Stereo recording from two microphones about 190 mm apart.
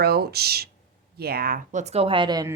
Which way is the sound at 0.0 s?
55° right (ahead or behind).